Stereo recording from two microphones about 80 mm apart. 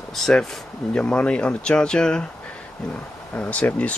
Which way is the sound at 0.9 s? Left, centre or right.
Centre.